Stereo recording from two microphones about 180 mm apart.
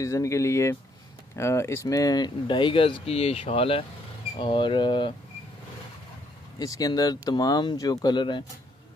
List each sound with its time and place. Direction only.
0.0 s speech: 15° left (ahead or behind)
6.6 s speech: 20° left (ahead or behind)